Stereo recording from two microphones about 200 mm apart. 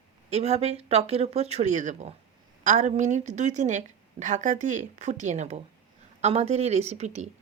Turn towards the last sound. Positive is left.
turn(degrees=-35)  # may be behind; listen again after turning